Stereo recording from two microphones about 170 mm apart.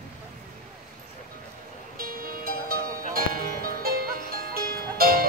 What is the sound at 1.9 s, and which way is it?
Music, 60° right (ahead or behind).